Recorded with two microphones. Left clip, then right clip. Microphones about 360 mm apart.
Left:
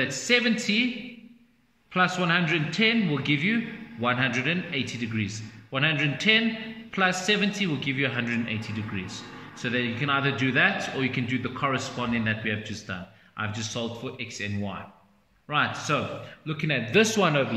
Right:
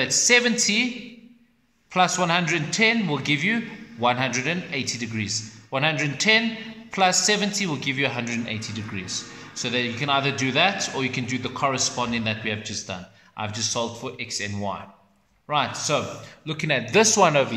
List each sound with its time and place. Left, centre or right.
0.0 s a man's voice: centre
2.0 s a man's voice: centre